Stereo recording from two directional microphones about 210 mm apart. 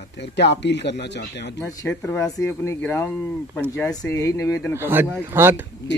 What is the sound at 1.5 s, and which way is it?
Speech, 15° left (ahead or behind).